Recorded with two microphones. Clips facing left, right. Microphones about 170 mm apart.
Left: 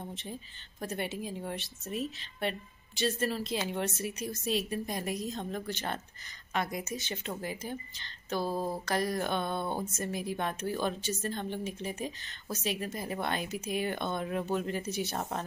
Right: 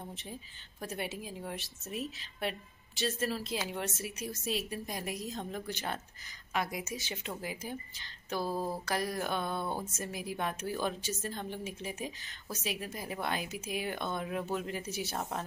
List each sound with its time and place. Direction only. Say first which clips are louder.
0.0 s a woman's voice: left 3 dB; 5° right (ahead or behind)
8.5 s a sound: even; 15° left (ahead or behind)
8.8 s a woman's voice: left 3 dB; 5° right (ahead or behind)
9.6 s speech: left 2 dB; 25° left (ahead or behind)
9.9 s a woman's voice: left 3 dB; 5° right (ahead or behind)